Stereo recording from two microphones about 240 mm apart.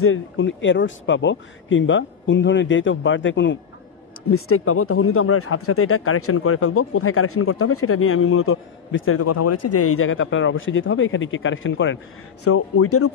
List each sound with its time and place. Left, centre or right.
0.0 s speech: left
4.3 s speech: left
12.4 s speech: left